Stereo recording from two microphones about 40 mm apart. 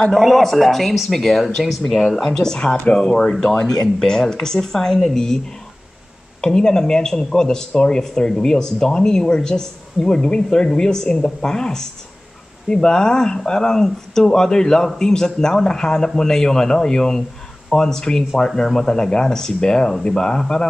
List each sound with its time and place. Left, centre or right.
0.2 s speech: centre
1.4 s speech: centre
6.4 s speech: centre